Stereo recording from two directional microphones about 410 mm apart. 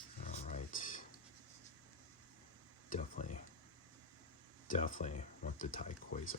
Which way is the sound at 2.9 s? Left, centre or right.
Centre.